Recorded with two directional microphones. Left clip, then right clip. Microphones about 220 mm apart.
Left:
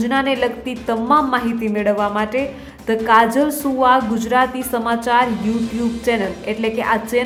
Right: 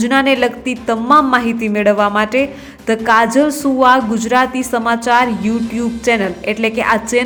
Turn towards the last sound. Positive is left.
turn(degrees=-15)  # may be behind; listen again after turning